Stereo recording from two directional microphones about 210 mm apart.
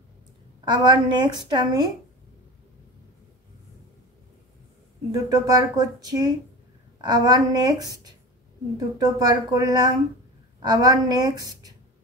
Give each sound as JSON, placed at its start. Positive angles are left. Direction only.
{"t": 0.7, "sound": "a woman's voice", "side_deg": -20}
{"t": 5.1, "sound": "a woman's voice", "side_deg": -20}